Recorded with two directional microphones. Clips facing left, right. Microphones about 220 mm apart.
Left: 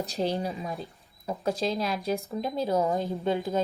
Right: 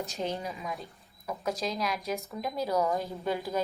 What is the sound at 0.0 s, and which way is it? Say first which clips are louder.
A woman's voice: left 5 dB; 35° left (ahead or behind).